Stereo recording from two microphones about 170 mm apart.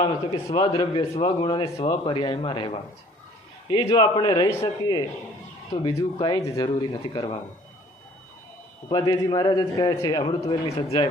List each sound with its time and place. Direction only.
0.0 s a man's voice: 30° left (ahead or behind)
8.9 s a man's voice: 25° left (ahead or behind)